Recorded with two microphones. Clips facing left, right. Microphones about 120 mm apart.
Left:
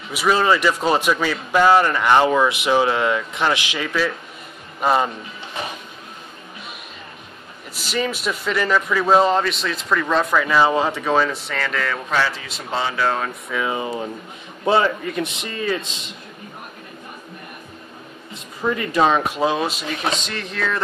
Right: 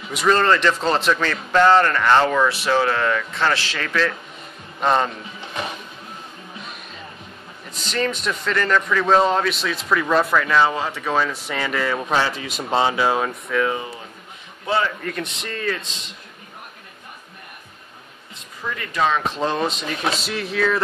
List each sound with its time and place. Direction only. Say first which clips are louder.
0.1 s a man's voice: even; 5° left (ahead or behind)
7.7 s speech: even; 5° left (ahead or behind)
10.4 s speech: left 2 dB; 5° left (ahead or behind)
11.5 s speech: right 1 dB; 10° right (ahead or behind)
13.5 s a man's voice: right 1 dB; 10° left (ahead or behind)
15.0 s a man's voice: left 3 dB; 10° left (ahead or behind)
18.8 s speech: left 3 dB; 15° left (ahead or behind); by 20.8 s 5° right (ahead or behind)